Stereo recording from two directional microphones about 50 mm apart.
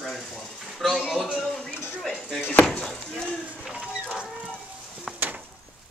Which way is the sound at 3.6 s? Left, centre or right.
Centre.